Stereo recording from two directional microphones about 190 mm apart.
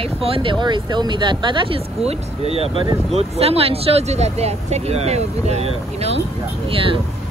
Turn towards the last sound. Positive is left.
turn(degrees=-30)  # may be behind; listen again after turning